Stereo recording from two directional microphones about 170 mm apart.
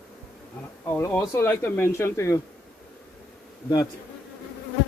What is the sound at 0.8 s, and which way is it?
Speech, 15° left (ahead or behind).